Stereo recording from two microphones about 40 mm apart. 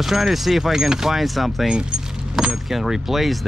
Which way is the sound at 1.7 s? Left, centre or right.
Right.